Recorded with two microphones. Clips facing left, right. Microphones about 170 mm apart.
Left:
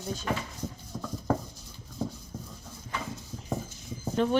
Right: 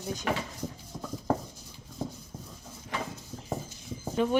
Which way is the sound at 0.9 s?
10° right (ahead or behind).